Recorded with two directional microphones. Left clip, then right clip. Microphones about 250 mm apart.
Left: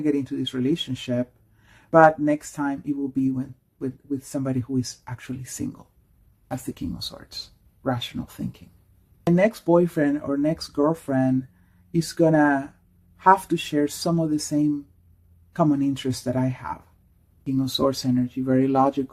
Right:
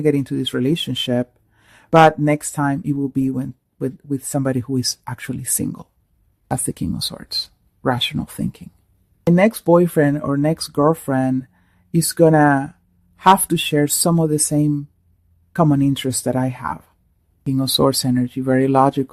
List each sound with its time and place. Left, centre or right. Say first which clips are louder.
0.0 s speech: right 6 dB; right
9.3 s speech: right 5 dB; right